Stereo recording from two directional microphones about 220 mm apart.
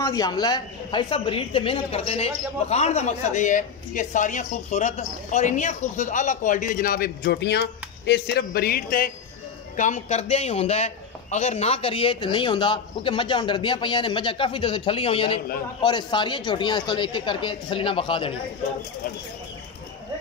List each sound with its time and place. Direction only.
0.0 s a woman's voice: 15° left (ahead or behind)